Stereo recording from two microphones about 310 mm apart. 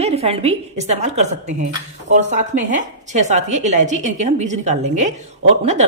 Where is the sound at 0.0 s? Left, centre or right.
Centre.